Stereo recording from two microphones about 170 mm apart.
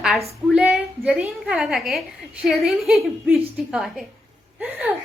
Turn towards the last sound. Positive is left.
turn(degrees=-5)  # may be behind; listen again after turning